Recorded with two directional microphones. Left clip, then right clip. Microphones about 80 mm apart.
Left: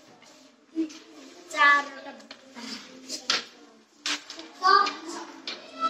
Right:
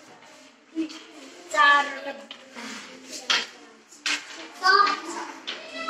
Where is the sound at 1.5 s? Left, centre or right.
Right.